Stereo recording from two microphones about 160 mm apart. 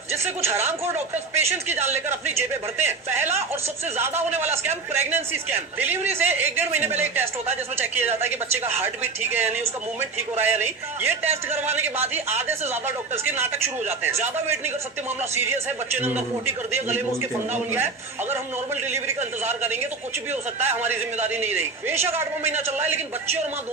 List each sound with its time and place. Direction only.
0.1 s a man's voice: 15° right (ahead or behind)
4.3 s a man's voice: 15° right (ahead or behind)
9.3 s a man's voice: 10° right (ahead or behind)
13.4 s a man's voice: 15° right (ahead or behind)
15.2 s a man's voice: 15° right (ahead or behind)